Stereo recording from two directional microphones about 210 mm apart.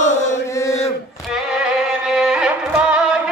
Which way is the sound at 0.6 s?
15° left (ahead or behind).